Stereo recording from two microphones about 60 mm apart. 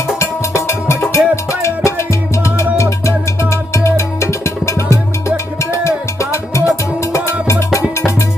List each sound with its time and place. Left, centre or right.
0.2 s music: left
3.7 s music: left